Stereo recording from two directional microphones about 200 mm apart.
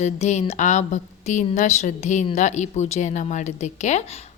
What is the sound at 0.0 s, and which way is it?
Speech, 35° left (ahead or behind).